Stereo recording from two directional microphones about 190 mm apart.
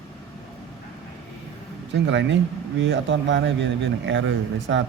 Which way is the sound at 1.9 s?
70° right (ahead or behind).